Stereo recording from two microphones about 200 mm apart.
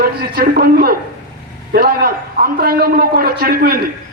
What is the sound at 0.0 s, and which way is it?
A man's voice, 50° right (ahead or behind).